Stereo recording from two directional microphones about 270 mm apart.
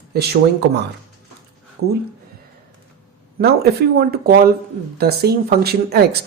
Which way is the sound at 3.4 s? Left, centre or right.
Right.